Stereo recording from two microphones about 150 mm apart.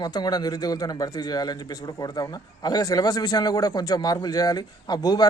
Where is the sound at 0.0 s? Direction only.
25° left (ahead or behind).